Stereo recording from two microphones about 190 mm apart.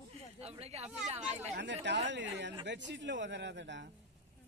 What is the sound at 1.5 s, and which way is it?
A man's voice, 70° right (ahead or behind).